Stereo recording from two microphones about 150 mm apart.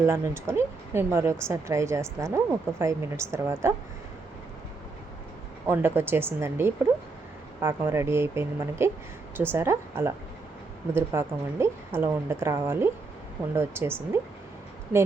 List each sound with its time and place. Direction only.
0.0 s a woman's voice: 15° right (ahead or behind)
5.6 s a woman's voice: 15° right (ahead or behind)